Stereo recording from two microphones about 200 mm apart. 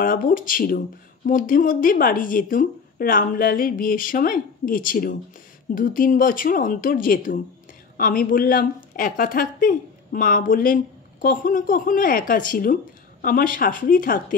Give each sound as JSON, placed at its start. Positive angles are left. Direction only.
{"t": 0.0, "sound": "speech", "side_deg": 45}